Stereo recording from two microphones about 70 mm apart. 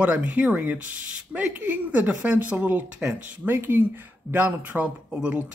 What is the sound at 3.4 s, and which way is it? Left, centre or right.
Speech, right.